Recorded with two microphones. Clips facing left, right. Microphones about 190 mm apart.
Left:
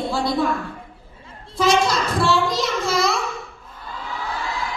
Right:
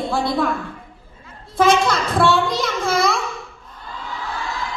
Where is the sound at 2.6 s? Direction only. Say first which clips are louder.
Right 1 dB; 55° right (ahead or behind).